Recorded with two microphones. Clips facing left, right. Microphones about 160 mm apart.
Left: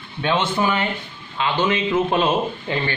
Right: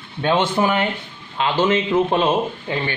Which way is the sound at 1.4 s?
40° right (ahead or behind).